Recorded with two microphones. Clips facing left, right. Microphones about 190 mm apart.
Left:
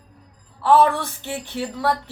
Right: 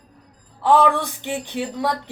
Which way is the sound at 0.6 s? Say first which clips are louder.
Even; 15° right (ahead or behind).